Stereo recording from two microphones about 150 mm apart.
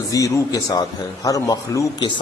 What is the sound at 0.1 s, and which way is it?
A man's voice, 20° left (ahead or behind).